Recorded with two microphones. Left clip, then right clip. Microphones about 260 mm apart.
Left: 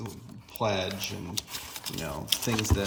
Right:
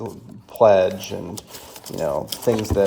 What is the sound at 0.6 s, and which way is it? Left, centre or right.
Speech, centre.